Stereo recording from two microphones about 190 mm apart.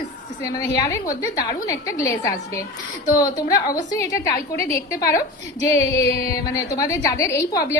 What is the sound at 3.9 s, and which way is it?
A woman's voice, 15° left (ahead or behind).